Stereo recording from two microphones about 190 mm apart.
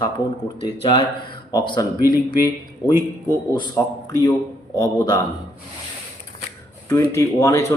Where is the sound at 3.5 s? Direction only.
20° left (ahead or behind).